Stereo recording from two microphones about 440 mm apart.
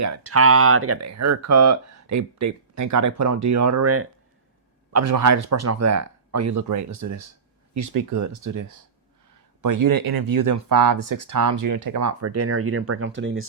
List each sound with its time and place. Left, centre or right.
0.0 s speech: right